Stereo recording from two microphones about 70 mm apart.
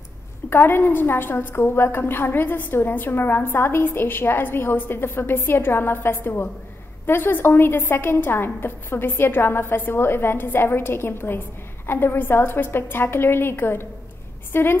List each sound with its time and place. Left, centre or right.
0.5 s a woman's voice: left